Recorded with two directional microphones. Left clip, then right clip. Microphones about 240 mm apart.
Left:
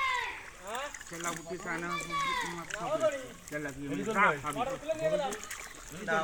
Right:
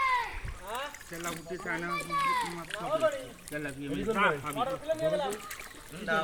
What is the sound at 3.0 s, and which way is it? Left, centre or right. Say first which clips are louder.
Speech: right 1 dB; left.